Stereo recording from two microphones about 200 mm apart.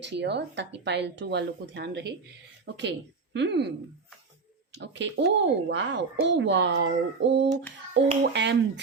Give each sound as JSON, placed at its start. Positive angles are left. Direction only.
{"t": 0.0, "sound": "speech", "side_deg": -60}
{"t": 4.8, "sound": "speech", "side_deg": -60}